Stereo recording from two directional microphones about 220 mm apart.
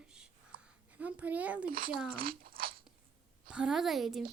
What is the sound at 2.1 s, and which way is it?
Speech, 40° right (ahead or behind).